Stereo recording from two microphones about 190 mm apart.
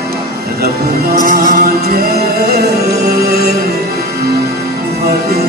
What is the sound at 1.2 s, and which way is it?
Music, 45° right (ahead or behind).